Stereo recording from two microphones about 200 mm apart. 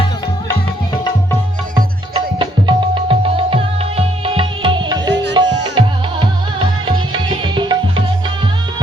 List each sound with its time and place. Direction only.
2.1 s music: 25° right (ahead or behind)